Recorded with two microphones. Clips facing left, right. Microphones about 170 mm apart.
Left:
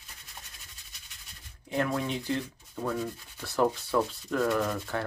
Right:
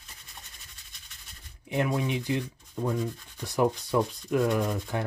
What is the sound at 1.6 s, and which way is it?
Speech, 20° right (ahead or behind).